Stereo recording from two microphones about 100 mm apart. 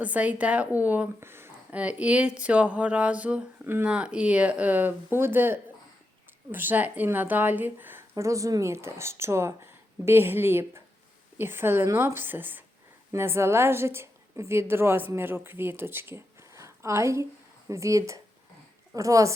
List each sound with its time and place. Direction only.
0.0 s speech: 15° right (ahead or behind)
1.7 s speech: 10° right (ahead or behind)
8.1 s a woman's voice: 30° right (ahead or behind)